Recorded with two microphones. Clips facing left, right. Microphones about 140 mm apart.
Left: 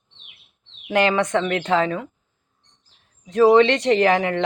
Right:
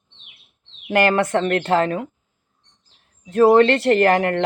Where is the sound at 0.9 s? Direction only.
45° right (ahead or behind).